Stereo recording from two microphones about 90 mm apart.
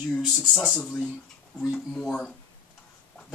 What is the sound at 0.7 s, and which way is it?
Speech, 10° left (ahead or behind).